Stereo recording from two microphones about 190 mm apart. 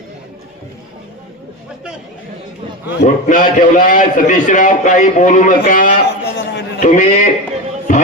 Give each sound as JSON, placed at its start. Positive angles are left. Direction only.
{"t": 3.0, "sound": "a man's voice", "side_deg": 40}
{"t": 6.2, "sound": "a sound", "side_deg": 65}
{"t": 6.7, "sound": "a man's voice", "side_deg": 40}
{"t": 7.9, "sound": "music", "side_deg": 40}